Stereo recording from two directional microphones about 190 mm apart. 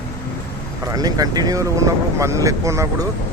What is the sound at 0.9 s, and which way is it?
Speech, 20° right (ahead or behind).